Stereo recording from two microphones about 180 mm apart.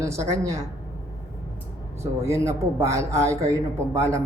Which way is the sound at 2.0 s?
15° right (ahead or behind).